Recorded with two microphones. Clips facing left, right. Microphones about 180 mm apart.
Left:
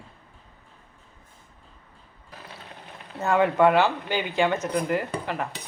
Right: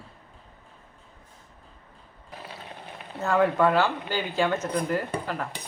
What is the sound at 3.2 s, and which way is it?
Speech, 10° left (ahead or behind).